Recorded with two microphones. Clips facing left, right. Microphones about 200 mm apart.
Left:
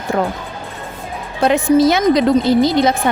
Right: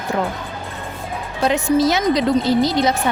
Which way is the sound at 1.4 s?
55° left (ahead or behind).